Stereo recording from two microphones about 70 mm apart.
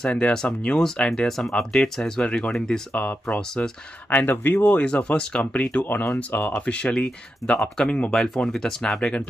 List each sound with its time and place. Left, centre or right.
0.0 s speech: centre
2.9 s speech: left
3.3 s speech: centre
4.1 s speech: left
4.6 s speech: centre
6.5 s speech: centre